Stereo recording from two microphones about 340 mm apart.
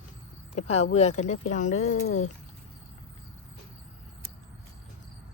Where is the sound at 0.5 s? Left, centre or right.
Centre.